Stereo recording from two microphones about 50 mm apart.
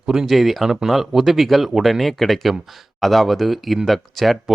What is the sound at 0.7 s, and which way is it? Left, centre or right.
Speech, centre.